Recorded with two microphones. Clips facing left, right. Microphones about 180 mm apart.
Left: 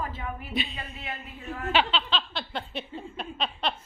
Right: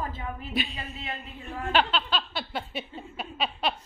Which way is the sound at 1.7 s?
Centre (ahead or behind).